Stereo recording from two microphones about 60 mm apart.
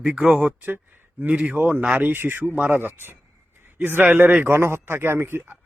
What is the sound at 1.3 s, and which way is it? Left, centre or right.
Speech, centre.